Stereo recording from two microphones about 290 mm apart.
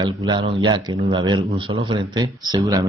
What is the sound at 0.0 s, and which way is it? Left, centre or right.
Speech, centre.